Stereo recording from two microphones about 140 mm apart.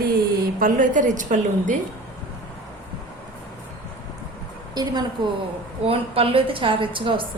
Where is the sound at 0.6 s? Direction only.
75° right (ahead or behind).